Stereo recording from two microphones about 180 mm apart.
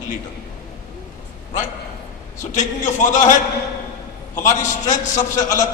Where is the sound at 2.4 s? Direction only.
45° left (ahead or behind).